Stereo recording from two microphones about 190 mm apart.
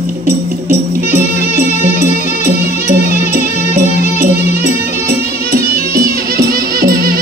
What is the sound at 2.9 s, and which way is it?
Music, 50° right (ahead or behind).